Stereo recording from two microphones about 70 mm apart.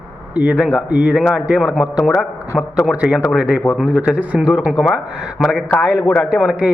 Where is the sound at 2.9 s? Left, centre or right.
Centre.